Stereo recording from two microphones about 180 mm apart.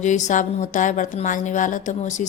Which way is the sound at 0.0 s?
40° left (ahead or behind).